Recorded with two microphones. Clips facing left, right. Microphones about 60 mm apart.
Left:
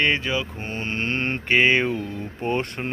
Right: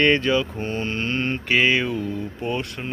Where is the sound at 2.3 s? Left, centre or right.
Left.